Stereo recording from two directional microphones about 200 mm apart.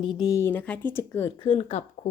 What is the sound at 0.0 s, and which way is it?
Speech, 20° left (ahead or behind).